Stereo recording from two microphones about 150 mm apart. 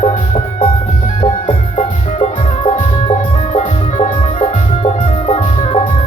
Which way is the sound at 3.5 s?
45° left (ahead or behind).